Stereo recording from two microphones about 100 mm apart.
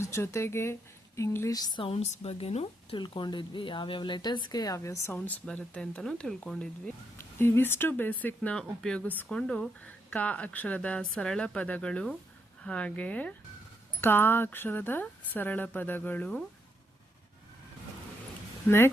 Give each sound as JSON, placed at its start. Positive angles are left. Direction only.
{"t": 0.0, "sound": "speech", "side_deg": 30}
{"t": 1.5, "sound": "speech", "side_deg": 40}
{"t": 1.8, "sound": "speech", "side_deg": 80}
{"t": 3.2, "sound": "speech", "side_deg": 50}
{"t": 5.1, "sound": "speech", "side_deg": 15}
{"t": 7.2, "sound": "speech", "side_deg": 25}